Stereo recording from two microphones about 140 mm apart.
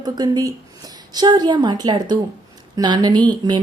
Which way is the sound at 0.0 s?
25° right (ahead or behind).